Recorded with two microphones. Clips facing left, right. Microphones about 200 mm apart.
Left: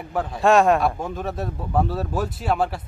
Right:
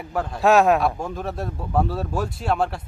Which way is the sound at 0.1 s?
Centre (ahead or behind).